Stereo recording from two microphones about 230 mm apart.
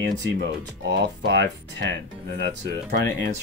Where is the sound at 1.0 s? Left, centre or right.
Right.